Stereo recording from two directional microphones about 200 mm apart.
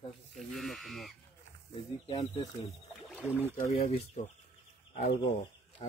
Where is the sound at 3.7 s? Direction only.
30° left (ahead or behind).